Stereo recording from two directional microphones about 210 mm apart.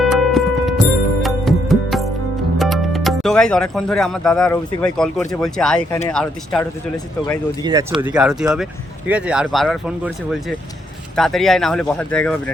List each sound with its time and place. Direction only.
0.0 s music: centre (ahead or behind)
2.6 s speech: centre (ahead or behind)
7.6 s speech: 20° right (ahead or behind)
8.1 s speech: 5° right (ahead or behind)
11.2 s speech: centre (ahead or behind)